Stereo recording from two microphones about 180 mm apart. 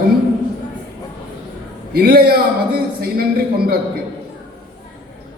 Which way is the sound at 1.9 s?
60° right (ahead or behind).